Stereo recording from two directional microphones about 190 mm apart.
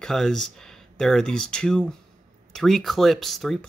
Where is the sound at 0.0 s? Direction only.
Centre (ahead or behind).